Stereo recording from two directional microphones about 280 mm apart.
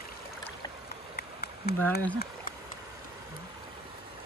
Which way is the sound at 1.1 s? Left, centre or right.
Left.